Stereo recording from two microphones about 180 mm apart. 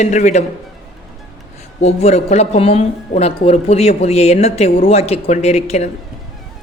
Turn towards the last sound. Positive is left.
turn(degrees=35)  # may be behind; listen again after turning